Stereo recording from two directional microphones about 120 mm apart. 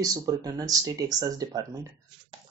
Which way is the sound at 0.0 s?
30° right (ahead or behind).